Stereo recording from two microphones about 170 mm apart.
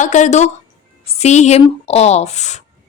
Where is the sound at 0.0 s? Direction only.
45° left (ahead or behind).